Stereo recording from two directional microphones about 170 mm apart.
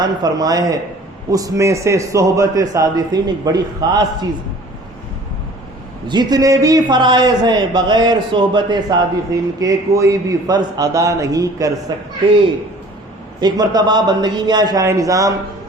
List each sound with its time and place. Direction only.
0.0 s a man's voice: 25° right (ahead or behind)
6.1 s a man's voice: 25° right (ahead or behind)
13.4 s a man's voice: 25° right (ahead or behind)